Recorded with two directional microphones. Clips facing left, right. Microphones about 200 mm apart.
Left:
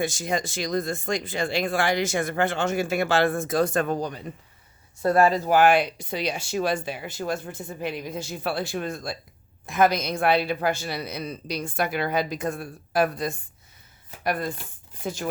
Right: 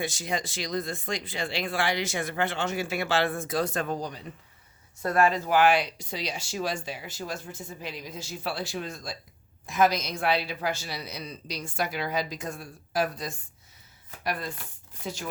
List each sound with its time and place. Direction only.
0.0 s speech: 45° left (ahead or behind)
5.0 s speech: 35° left (ahead or behind); by 15.3 s 50° left (ahead or behind)